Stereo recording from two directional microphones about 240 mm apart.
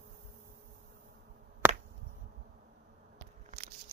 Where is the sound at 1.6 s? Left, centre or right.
Centre.